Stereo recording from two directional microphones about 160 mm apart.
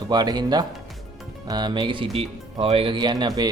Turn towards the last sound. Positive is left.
turn(degrees=-25)  # may be behind; listen again after turning